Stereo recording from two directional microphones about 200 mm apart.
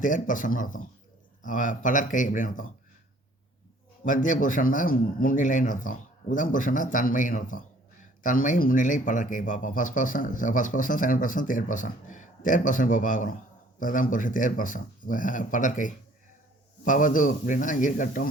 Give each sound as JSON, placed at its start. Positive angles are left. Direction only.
{"t": 0.0, "sound": "speech", "side_deg": 40}
{"t": 4.0, "sound": "speech", "side_deg": 40}